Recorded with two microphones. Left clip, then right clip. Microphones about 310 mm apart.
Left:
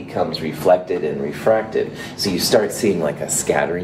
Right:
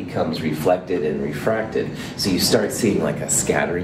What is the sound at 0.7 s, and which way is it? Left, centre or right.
Speech, left.